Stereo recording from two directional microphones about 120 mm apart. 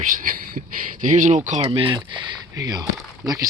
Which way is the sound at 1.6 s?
50° right (ahead or behind).